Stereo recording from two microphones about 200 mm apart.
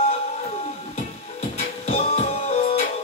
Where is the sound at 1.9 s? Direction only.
35° left (ahead or behind).